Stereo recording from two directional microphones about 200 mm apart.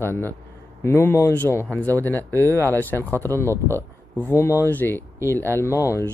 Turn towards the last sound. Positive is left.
turn(degrees=15)  # may be behind; listen again after turning